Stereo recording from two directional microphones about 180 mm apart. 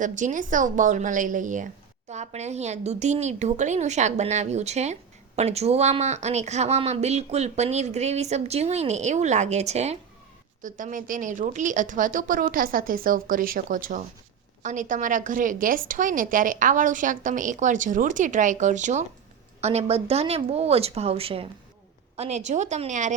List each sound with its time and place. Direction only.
0.0 s a woman's voice: 45° right (ahead or behind)